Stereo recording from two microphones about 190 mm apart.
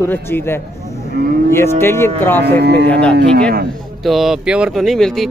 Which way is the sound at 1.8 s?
10° left (ahead or behind).